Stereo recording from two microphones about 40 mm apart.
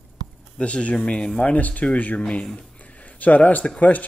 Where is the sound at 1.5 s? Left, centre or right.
Left.